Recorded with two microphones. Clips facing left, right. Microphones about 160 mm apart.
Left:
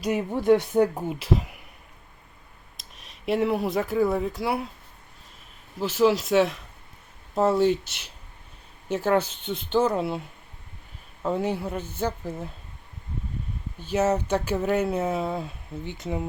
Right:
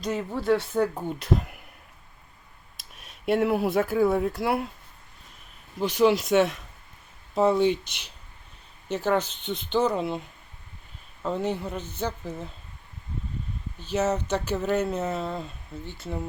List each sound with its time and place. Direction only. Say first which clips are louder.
0.0 s speech: left 4 dB; 15° left (ahead or behind)
2.7 s speech: even; centre (ahead or behind)
5.8 s speech: even; 5° left (ahead or behind)
8.9 s speech: left 2 dB; 10° left (ahead or behind)
13.7 s speech: left 2 dB; 10° left (ahead or behind)